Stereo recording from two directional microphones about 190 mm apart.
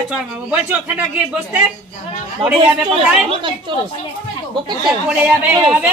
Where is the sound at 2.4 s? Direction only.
30° right (ahead or behind).